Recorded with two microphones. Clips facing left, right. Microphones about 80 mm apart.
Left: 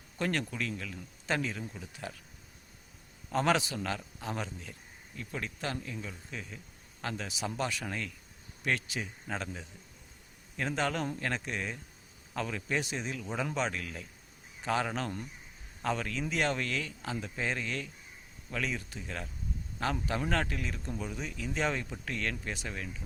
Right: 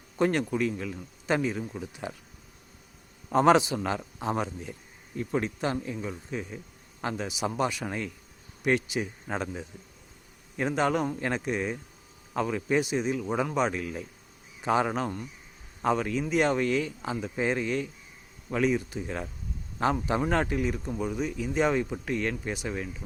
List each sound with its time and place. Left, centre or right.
0.2 s a man's voice: right
3.3 s a man's voice: right